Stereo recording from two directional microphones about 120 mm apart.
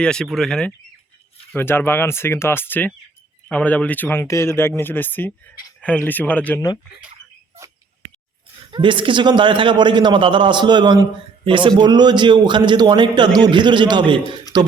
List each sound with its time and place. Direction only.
0.0 s speech: 5° left (ahead or behind)
1.5 s speech: 20° left (ahead or behind)
8.7 s a man's voice: 45° right (ahead or behind)